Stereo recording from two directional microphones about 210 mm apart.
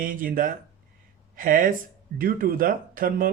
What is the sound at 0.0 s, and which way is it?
Speech, 40° right (ahead or behind).